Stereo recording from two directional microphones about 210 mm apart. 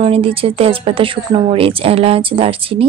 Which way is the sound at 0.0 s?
25° right (ahead or behind).